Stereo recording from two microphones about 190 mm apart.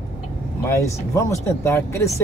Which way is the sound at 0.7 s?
15° left (ahead or behind).